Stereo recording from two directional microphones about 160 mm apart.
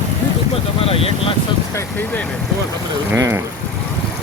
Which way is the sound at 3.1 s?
15° right (ahead or behind).